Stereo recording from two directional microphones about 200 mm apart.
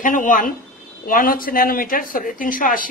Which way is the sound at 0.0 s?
40° left (ahead or behind).